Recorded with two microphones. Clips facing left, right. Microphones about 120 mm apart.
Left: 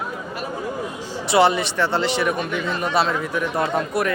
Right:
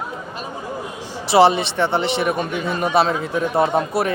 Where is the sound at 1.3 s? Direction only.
25° right (ahead or behind).